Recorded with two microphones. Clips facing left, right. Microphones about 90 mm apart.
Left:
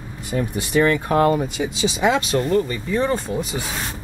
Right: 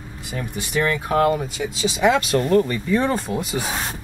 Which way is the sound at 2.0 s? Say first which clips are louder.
Right 2 dB; centre (ahead or behind).